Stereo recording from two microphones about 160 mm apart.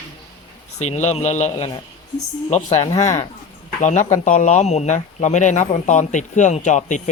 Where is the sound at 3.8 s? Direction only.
50° left (ahead or behind).